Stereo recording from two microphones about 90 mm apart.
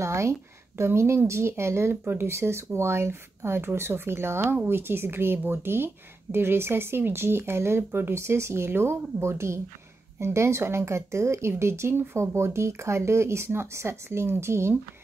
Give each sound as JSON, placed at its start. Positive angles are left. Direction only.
{"t": 0.0, "sound": "speech", "side_deg": -30}